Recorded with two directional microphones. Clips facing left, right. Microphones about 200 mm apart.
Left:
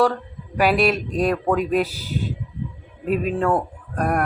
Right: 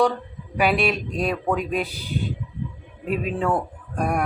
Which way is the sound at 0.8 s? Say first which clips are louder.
Left 4 dB; 40° left (ahead or behind).